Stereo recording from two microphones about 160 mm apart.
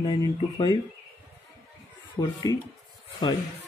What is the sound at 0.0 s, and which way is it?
Speech, 30° left (ahead or behind).